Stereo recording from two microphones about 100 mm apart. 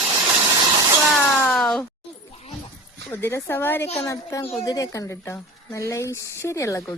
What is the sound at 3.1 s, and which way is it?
Speech, 20° left (ahead or behind).